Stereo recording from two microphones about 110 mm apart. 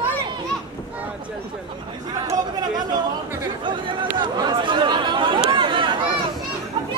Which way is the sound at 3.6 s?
50° right (ahead or behind).